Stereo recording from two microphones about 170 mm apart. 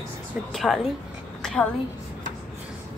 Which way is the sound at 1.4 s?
5° left (ahead or behind).